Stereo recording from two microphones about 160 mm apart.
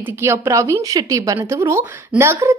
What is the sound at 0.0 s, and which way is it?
Speech, 15° right (ahead or behind).